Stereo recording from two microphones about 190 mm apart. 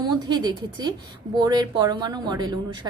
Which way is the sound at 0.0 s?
20° right (ahead or behind).